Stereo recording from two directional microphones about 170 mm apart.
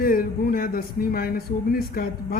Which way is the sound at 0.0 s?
60° left (ahead or behind).